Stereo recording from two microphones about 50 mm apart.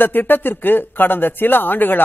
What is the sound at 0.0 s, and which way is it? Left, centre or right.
Speech, left.